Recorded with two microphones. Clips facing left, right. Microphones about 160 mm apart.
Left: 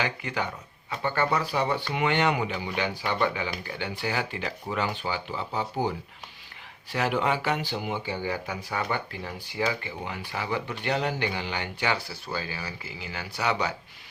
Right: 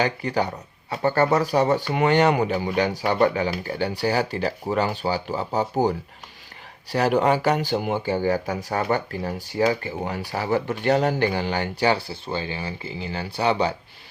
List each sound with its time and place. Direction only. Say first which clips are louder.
0.0 s speech: right 7 dB; 35° right (ahead or behind)